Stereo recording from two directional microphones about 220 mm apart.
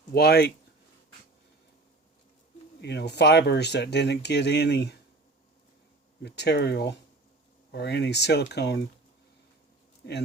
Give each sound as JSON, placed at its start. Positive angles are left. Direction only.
{"t": 0.1, "sound": "speech", "side_deg": 45}
{"t": 2.8, "sound": "speech", "side_deg": 50}
{"t": 6.2, "sound": "speech", "side_deg": 50}
{"t": 10.0, "sound": "speech", "side_deg": 50}